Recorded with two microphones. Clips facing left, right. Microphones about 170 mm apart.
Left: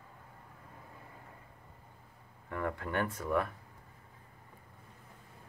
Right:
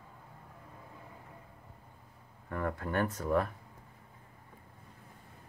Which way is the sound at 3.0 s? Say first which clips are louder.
Right 3 dB; 45° right (ahead or behind).